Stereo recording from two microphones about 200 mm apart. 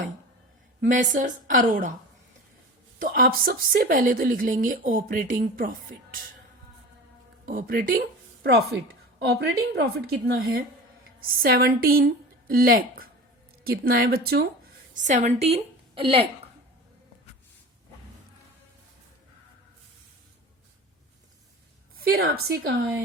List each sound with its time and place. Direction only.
0.8 s a woman's voice: 40° right (ahead or behind)
3.0 s a woman's voice: 45° right (ahead or behind)
7.4 s a woman's voice: 45° right (ahead or behind)
14.9 s a woman's voice: 40° right (ahead or behind)
21.9 s a woman's voice: 50° right (ahead or behind)